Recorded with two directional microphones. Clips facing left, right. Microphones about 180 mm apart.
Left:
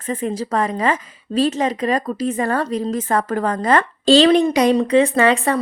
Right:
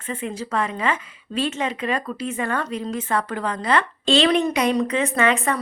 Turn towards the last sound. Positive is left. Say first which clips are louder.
# left 5 dB
turn(degrees=35)  # may be behind; listen again after turning